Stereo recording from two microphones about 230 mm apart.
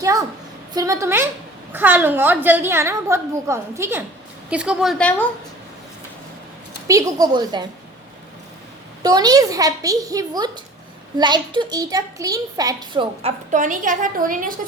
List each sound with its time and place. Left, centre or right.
0.0 s a woman's voice: centre
6.8 s a woman's voice: centre
9.0 s a woman's voice: centre
13.5 s a woman's voice: right